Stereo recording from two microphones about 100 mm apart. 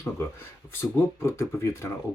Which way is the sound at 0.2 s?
30° left (ahead or behind).